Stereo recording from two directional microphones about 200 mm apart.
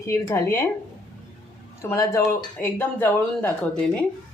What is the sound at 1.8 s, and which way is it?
Speech, 15° left (ahead or behind).